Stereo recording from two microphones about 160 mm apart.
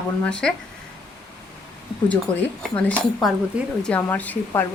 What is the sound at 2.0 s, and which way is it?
A woman's voice, 10° left (ahead or behind).